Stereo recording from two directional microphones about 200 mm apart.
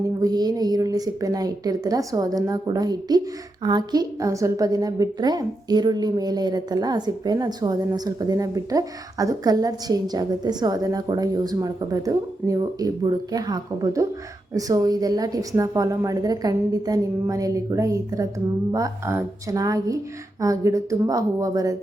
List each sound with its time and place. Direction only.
0.2 s a woman's voice: 20° right (ahead or behind)